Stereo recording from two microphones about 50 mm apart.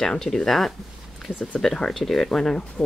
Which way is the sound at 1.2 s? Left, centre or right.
Centre.